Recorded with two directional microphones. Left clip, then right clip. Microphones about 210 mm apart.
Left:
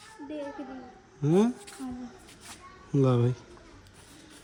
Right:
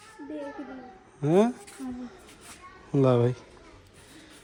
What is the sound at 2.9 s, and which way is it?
Speech, 10° left (ahead or behind).